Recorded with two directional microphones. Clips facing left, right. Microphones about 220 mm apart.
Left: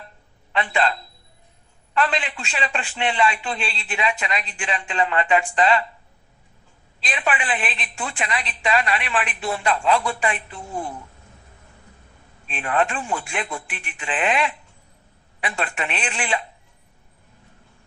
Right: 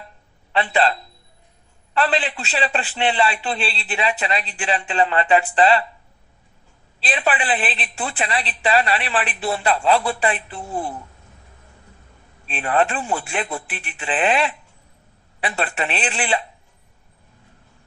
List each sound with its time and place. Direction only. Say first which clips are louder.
0.5 s a woman's voice: right 3 dB; 35° right (ahead or behind)
7.0 s a woman's voice: right 3 dB; 35° right (ahead or behind)
12.5 s a woman's voice: right 3 dB; 35° right (ahead or behind)